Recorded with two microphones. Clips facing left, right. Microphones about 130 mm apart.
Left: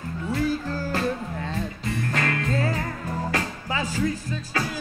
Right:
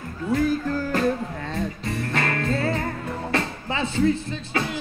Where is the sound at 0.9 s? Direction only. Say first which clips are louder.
Right 3 dB; 40° right (ahead or behind).